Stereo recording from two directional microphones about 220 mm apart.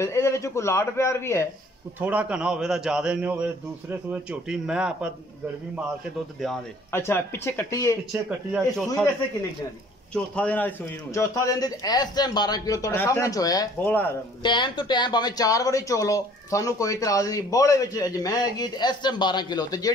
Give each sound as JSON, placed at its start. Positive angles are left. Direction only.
{"t": 0.0, "sound": "speech", "side_deg": 15}
{"t": 2.0, "sound": "a man's voice", "side_deg": -5}
{"t": 6.4, "sound": "speech", "side_deg": 5}
{"t": 8.1, "sound": "a man's voice", "side_deg": -5}
{"t": 10.1, "sound": "speech", "side_deg": 5}
{"t": 14.4, "sound": "speech", "side_deg": 20}